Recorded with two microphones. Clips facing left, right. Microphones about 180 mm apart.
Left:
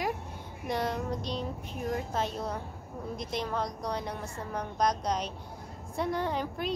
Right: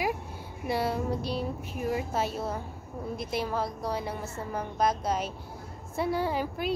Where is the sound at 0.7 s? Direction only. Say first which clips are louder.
Right 3 dB; 5° right (ahead or behind).